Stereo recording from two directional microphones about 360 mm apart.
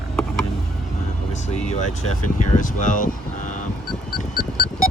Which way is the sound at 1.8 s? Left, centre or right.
Left.